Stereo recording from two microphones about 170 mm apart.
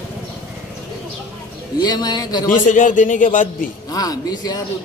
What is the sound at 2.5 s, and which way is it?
A man's voice, 50° left (ahead or behind).